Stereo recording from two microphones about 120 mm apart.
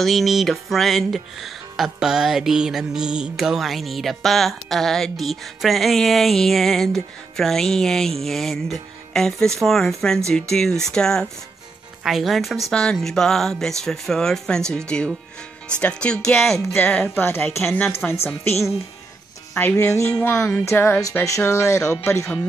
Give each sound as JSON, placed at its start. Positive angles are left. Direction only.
{"t": 0.0, "sound": "music", "side_deg": 0}
{"t": 15.8, "sound": "speech", "side_deg": 10}
{"t": 16.7, "sound": "speech", "side_deg": 15}
{"t": 19.5, "sound": "speech", "side_deg": 20}
{"t": 20.3, "sound": "music", "side_deg": 5}
{"t": 20.6, "sound": "speech", "side_deg": 20}